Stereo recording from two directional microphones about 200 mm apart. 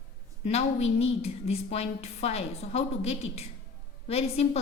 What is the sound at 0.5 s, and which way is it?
A woman's voice, 30° left (ahead or behind).